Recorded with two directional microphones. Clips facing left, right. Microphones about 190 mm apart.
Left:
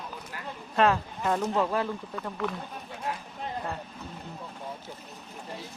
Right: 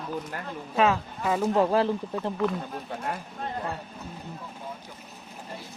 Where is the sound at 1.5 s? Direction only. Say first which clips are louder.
Right 5 dB; 30° right (ahead or behind).